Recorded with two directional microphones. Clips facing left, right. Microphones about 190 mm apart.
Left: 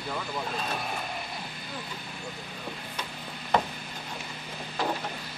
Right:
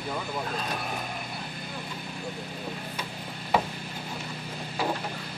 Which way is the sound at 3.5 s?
5° right (ahead or behind).